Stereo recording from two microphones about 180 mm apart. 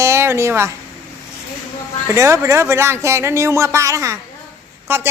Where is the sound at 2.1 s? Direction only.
15° right (ahead or behind).